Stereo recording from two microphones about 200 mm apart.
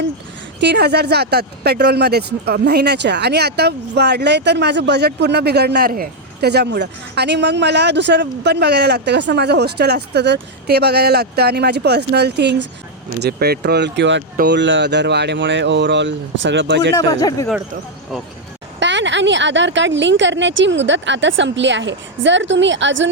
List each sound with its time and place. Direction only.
0.6 s speech: 55° right (ahead or behind)
17.1 s speech: 20° left (ahead or behind)
18.8 s speech: 65° right (ahead or behind)